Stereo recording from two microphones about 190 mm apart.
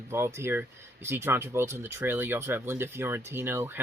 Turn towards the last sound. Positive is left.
turn(degrees=-10)  # may be behind; listen again after turning